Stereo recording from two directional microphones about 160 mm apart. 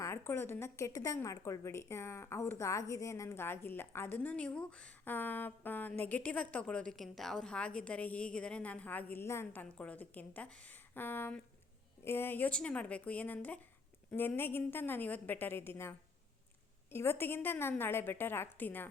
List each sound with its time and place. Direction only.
0.0 s a woman's voice: 15° left (ahead or behind)